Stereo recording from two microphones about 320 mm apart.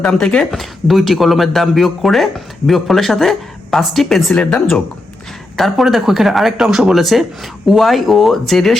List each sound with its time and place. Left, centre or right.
0.0 s speech: centre